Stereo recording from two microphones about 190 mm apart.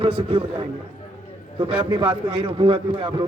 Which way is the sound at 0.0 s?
30° right (ahead or behind).